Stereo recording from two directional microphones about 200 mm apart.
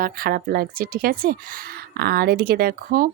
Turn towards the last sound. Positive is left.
turn(degrees=-45)  # may be behind; listen again after turning